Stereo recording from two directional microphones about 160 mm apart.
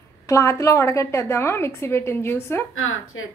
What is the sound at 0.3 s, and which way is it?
A woman's voice, 20° left (ahead or behind).